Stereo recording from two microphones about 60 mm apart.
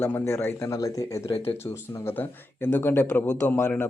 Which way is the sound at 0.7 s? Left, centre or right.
Left.